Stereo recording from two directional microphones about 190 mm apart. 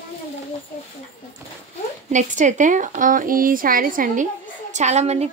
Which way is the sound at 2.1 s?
40° right (ahead or behind).